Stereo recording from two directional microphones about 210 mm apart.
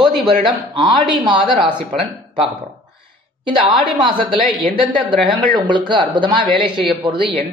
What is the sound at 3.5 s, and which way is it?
Speech, 25° right (ahead or behind).